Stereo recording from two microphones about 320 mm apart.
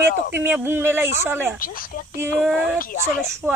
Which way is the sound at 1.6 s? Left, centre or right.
Left.